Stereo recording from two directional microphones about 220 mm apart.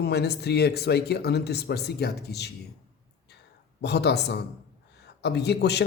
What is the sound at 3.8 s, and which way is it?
Speech, 50° left (ahead or behind).